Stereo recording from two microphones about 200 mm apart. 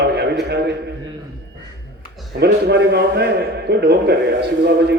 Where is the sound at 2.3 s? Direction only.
55° right (ahead or behind).